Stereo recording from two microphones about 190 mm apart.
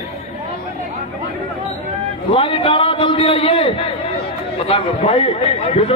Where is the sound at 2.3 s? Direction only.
25° left (ahead or behind).